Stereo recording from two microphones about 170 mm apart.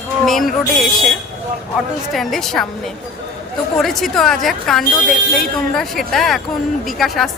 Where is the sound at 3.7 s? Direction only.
Centre (ahead or behind).